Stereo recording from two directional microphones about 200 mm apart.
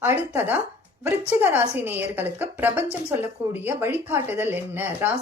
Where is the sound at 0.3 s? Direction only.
10° right (ahead or behind).